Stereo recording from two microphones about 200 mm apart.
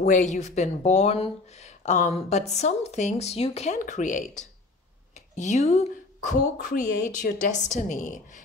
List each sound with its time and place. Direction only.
0.0 s speech: 40° left (ahead or behind)